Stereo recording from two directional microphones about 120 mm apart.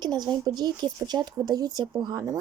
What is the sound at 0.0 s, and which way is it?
Speech, 35° right (ahead or behind).